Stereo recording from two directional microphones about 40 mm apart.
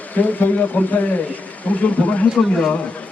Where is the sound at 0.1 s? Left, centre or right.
Left.